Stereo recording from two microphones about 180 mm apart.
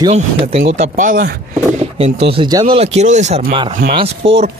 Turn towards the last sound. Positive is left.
turn(degrees=-35)  # may be behind; listen again after turning